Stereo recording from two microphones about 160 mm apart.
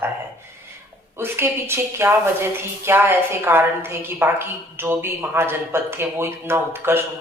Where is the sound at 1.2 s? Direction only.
15° right (ahead or behind).